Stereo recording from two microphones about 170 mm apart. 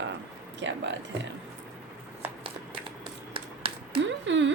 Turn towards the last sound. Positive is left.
turn(degrees=-90)